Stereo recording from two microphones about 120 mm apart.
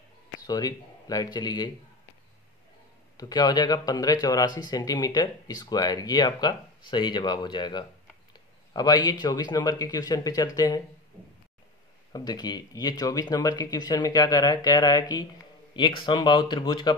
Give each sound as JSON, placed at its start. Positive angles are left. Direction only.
{"t": 0.5, "sound": "speech", "side_deg": 30}
{"t": 3.2, "sound": "speech", "side_deg": 35}
{"t": 8.3, "sound": "a sound", "side_deg": 35}
{"t": 9.2, "sound": "speech", "side_deg": 35}
{"t": 12.1, "sound": "speech", "side_deg": 35}